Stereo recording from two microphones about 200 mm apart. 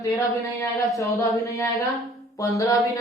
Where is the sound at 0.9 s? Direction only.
15° left (ahead or behind).